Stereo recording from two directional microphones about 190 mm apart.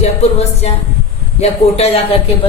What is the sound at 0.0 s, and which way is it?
Music, 35° left (ahead or behind).